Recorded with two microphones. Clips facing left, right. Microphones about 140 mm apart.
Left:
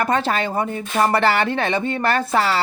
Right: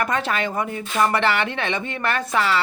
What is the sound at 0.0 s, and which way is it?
Speech, 30° left (ahead or behind).